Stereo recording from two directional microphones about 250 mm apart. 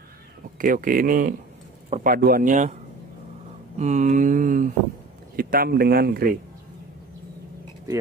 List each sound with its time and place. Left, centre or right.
0.6 s speech: right
3.7 s mantra: right
5.3 s speech: right